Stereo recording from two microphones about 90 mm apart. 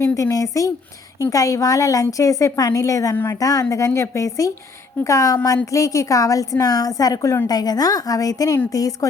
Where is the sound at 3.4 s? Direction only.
40° left (ahead or behind).